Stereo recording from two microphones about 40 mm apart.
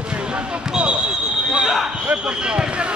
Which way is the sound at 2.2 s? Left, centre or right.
Right.